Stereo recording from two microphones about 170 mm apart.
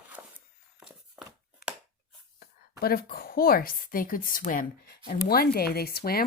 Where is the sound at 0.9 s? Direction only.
5° right (ahead or behind).